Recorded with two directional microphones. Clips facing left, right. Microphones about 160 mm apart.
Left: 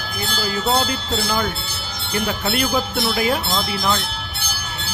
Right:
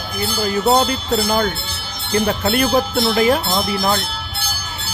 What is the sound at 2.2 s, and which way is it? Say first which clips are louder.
Speech: right 3 dB; 50° right (ahead or behind).